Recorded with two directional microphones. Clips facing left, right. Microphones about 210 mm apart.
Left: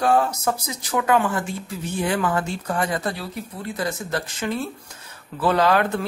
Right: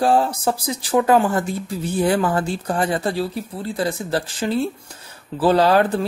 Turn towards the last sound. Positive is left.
turn(degrees=-35)  # may be behind; listen again after turning